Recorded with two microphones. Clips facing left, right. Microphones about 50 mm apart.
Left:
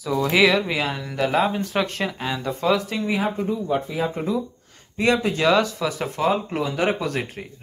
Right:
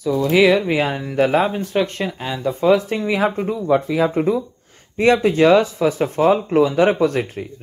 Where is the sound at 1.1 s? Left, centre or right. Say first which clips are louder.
Right 4 dB; right.